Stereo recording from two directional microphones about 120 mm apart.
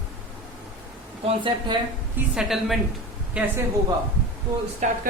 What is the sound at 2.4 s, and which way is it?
A man's voice, 5° right (ahead or behind).